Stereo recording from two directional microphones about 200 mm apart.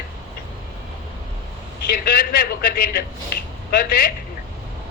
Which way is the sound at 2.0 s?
45° left (ahead or behind).